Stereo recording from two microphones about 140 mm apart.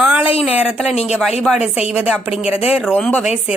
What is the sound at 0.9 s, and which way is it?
Speech, 50° left (ahead or behind).